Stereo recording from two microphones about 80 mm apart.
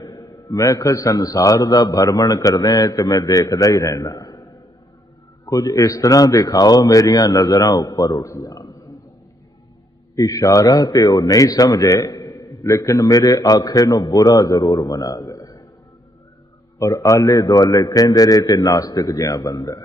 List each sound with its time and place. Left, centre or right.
0.0 s a man's voice: left
10.1 s a man's voice: left
16.7 s a man's voice: left